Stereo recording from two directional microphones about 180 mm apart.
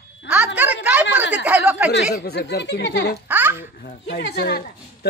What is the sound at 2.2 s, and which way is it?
Speech, 65° left (ahead or behind).